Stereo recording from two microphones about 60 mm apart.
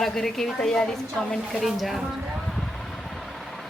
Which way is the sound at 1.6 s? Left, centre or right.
Centre.